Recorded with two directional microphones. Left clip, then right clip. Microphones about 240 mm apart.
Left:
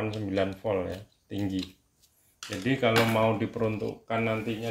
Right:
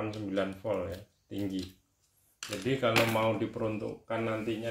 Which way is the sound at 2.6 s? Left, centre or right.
Left.